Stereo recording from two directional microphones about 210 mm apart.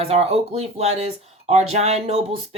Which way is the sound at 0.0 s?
30° right (ahead or behind).